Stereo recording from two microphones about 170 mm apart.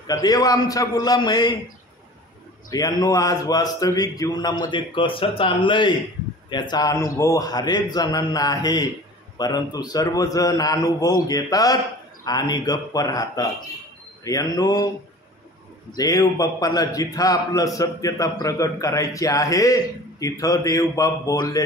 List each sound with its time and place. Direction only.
0.0 s a man's voice: 20° left (ahead or behind)
2.7 s a man's voice: 20° left (ahead or behind)
16.0 s a man's voice: 20° left (ahead or behind)